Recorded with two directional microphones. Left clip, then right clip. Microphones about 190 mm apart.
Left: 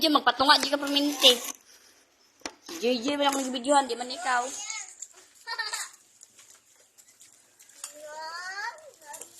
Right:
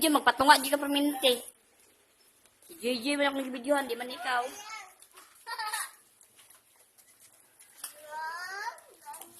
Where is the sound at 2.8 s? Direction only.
Centre (ahead or behind).